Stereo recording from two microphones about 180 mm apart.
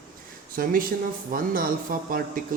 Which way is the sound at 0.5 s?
50° right (ahead or behind).